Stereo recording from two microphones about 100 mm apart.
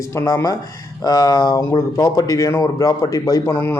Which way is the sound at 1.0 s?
40° left (ahead or behind).